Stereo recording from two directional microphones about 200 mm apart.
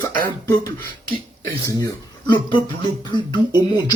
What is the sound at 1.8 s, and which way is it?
Speech, 20° left (ahead or behind).